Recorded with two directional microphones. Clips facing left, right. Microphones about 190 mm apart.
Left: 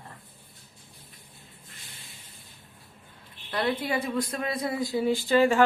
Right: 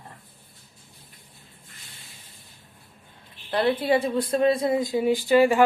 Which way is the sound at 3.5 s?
30° right (ahead or behind).